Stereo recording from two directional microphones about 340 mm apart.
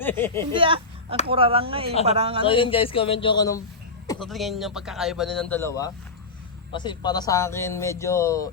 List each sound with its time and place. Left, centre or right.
0.0 s speech: centre
0.5 s speech: centre
2.5 s speech: centre